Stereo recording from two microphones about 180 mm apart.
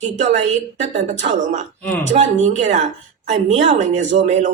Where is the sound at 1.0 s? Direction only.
40° right (ahead or behind).